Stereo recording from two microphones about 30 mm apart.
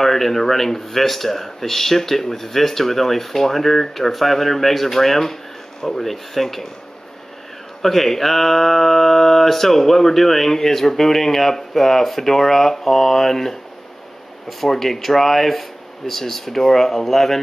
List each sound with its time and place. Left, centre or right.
0.0 s speech: centre
7.8 s speech: centre
14.7 s speech: centre